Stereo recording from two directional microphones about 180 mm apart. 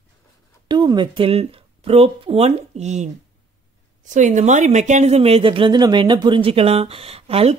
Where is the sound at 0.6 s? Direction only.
25° right (ahead or behind).